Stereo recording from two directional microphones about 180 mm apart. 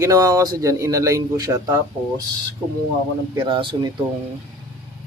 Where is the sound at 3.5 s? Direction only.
25° right (ahead or behind).